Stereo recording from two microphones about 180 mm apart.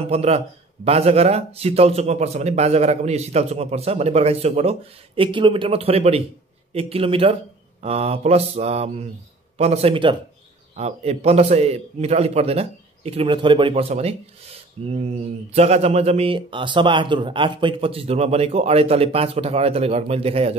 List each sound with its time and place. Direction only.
0.1 s speech: 35° right (ahead or behind)